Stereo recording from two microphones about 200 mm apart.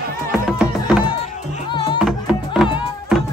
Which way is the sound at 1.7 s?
25° left (ahead or behind).